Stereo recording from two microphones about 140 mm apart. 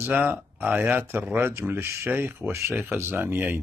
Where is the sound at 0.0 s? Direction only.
15° right (ahead or behind).